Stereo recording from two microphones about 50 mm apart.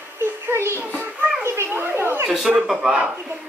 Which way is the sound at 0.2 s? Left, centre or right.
Right.